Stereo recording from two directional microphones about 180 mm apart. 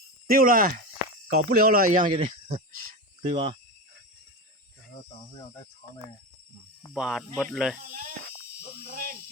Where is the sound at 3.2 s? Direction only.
30° right (ahead or behind).